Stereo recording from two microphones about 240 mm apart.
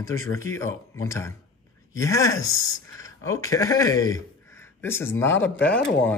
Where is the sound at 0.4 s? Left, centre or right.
Centre.